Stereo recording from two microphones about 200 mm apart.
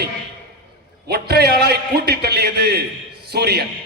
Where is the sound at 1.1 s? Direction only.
55° right (ahead or behind).